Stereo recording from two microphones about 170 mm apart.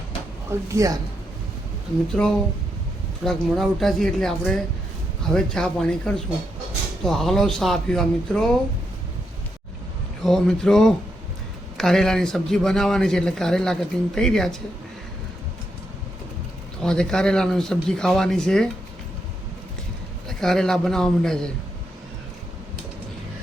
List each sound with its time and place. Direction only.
0.7 s a man's voice: 20° right (ahead or behind)
2.2 s a man's voice: 5° left (ahead or behind)
10.2 s a man's voice: centre (ahead or behind)
16.8 s a man's voice: 5° left (ahead or behind)
20.2 s a man's voice: 5° left (ahead or behind)